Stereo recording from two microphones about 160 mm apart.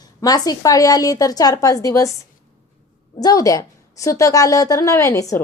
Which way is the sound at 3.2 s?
20° left (ahead or behind).